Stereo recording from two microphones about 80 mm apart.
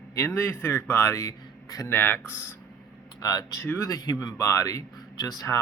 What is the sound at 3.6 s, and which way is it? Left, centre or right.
Speech, left.